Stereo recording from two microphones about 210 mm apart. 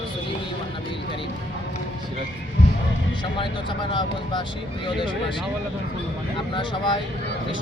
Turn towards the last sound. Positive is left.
turn(degrees=25)  # may be behind; listen again after turning